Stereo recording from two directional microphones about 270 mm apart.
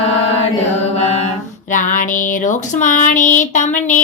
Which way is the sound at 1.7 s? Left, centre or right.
Left.